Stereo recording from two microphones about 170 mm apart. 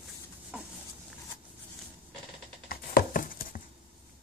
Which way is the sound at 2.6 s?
60° left (ahead or behind).